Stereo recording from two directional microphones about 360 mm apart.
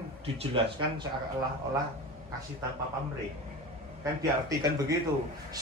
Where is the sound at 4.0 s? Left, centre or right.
Centre.